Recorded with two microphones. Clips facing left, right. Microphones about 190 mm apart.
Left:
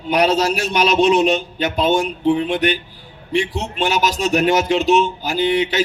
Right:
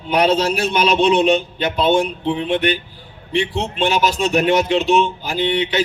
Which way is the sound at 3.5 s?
40° left (ahead or behind).